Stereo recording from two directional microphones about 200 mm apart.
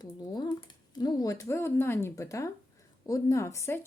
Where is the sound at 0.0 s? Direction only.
20° left (ahead or behind).